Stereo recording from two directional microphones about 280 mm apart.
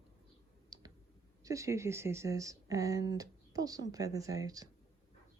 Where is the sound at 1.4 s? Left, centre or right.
Centre.